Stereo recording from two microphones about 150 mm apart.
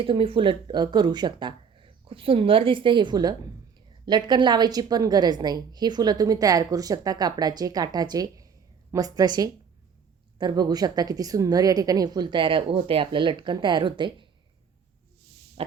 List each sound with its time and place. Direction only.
0.0 s a woman's voice: 35° right (ahead or behind)